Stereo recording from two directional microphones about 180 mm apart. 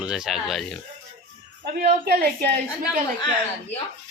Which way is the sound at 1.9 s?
60° right (ahead or behind).